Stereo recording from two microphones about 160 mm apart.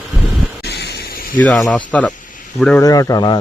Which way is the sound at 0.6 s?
90° left.